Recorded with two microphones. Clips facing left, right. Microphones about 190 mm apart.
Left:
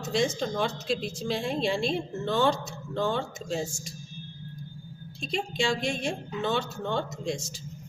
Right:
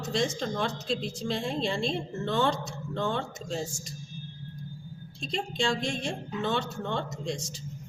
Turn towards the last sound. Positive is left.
turn(degrees=5)  # may be behind; listen again after turning